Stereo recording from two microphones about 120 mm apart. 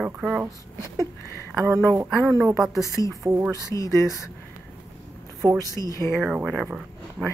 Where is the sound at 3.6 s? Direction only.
25° left (ahead or behind).